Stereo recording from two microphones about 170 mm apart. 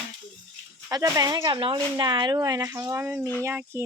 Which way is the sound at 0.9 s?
20° right (ahead or behind).